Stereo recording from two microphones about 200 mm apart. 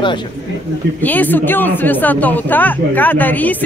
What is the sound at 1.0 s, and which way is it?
Speech, 10° left (ahead or behind).